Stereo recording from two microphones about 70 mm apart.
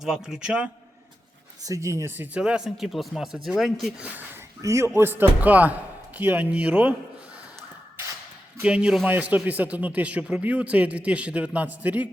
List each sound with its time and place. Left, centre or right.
0.0 s a man's voice: centre
1.6 s speech: right
2.1 s speech: right
2.4 s speech: centre
4.0 s speech: right
4.6 s speech: right
4.9 s speech: right
8.6 s a man's voice: centre